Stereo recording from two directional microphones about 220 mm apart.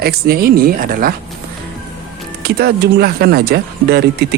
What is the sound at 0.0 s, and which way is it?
Speech, 45° right (ahead or behind).